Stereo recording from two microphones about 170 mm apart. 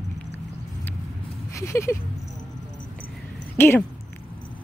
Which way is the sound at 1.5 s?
15° left (ahead or behind).